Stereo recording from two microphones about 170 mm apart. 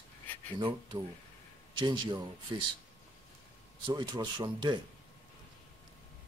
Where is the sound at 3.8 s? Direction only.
25° right (ahead or behind).